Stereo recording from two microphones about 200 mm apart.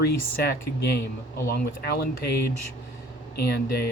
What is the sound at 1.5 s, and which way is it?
Speech, 50° left (ahead or behind).